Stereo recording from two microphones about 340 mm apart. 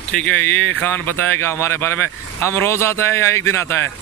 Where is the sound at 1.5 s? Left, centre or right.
Centre.